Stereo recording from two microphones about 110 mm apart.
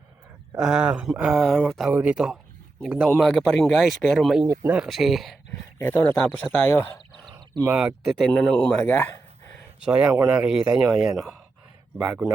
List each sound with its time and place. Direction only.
0.6 s speech: 5° right (ahead or behind)
1.9 s speech: 15° right (ahead or behind)
4.4 s speech: 30° right (ahead or behind)
4.7 s speech: 5° right (ahead or behind)
5.8 s speech: 20° left (ahead or behind)
7.7 s speech: 5° right (ahead or behind)
8.3 s speech: 15° left (ahead or behind)
9.8 s speech: 10° right (ahead or behind)
10.1 s speech: 30° right (ahead or behind)
10.3 s speech: 5° right (ahead or behind)